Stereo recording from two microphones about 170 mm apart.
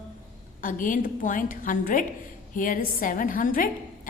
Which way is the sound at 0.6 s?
50° left (ahead or behind).